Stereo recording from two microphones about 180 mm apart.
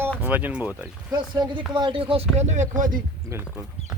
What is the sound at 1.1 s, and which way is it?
Speech, 25° right (ahead or behind).